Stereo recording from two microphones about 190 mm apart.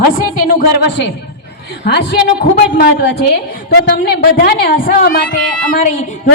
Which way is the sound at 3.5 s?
55° left (ahead or behind).